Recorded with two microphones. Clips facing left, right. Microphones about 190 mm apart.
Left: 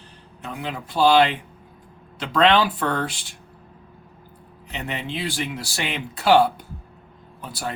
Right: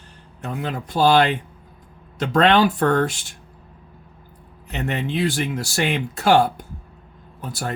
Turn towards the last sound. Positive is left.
turn(degrees=-50)  # may be behind; listen again after turning